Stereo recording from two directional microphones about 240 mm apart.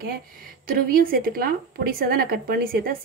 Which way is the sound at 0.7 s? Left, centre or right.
Right.